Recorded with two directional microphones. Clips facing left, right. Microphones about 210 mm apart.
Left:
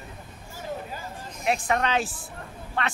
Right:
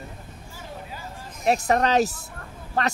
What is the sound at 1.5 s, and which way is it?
Speech, 40° right (ahead or behind).